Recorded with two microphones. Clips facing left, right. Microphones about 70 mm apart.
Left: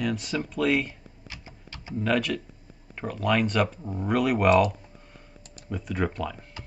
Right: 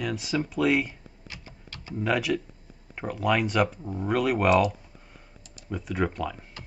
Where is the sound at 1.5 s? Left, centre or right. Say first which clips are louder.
Left 1 dB; left.